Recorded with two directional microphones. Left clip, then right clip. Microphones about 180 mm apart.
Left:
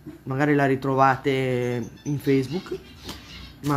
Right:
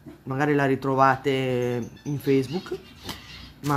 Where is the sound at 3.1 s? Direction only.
20° right (ahead or behind).